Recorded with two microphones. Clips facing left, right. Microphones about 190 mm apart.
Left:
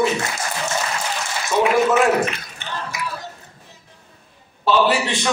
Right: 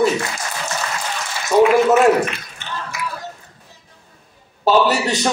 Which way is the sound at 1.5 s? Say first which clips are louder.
Right 6 dB; 40° right (ahead or behind).